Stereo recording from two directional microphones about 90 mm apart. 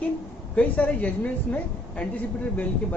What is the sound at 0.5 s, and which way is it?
Speech, 15° left (ahead or behind).